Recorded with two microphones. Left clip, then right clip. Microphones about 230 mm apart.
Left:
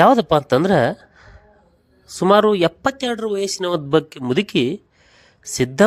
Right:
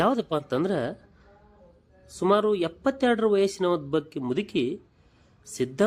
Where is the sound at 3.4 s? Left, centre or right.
Left.